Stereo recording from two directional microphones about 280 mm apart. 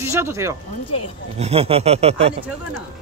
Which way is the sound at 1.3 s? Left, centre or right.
Right.